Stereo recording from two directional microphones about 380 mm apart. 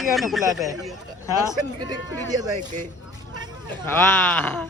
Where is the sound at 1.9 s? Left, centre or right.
Centre.